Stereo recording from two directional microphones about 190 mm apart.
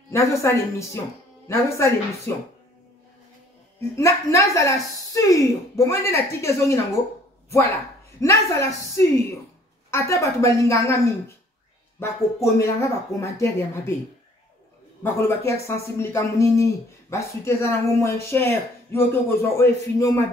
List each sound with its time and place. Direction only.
0.1 s speech: 15° left (ahead or behind)
3.9 s speech: 15° left (ahead or behind)
8.2 s speech: 15° left (ahead or behind)
12.0 s speech: 15° left (ahead or behind)
15.1 s speech: 15° left (ahead or behind)